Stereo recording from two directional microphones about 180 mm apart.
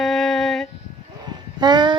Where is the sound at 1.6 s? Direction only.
25° right (ahead or behind).